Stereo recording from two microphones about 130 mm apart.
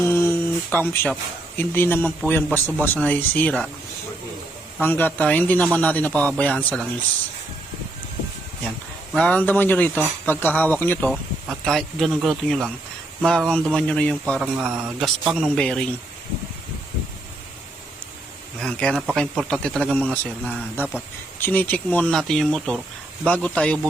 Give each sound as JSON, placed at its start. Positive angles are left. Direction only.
{"t": 0.0, "sound": "a sound", "side_deg": 20}
{"t": 1.5, "sound": "a man's voice", "side_deg": 15}
{"t": 4.8, "sound": "a man's voice", "side_deg": 15}
{"t": 9.1, "sound": "a man's voice", "side_deg": 10}
{"t": 11.1, "sound": "speech", "side_deg": 0}
{"t": 14.4, "sound": "speech", "side_deg": -5}
{"t": 18.6, "sound": "a man's voice", "side_deg": 5}